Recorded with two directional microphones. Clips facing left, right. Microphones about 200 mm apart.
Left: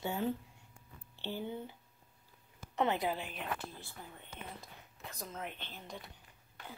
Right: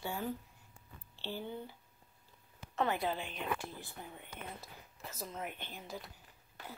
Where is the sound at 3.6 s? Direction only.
15° right (ahead or behind).